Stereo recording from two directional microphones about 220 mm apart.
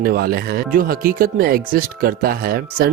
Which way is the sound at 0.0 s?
45° right (ahead or behind).